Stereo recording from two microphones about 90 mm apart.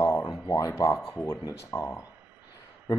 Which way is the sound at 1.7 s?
30° left (ahead or behind).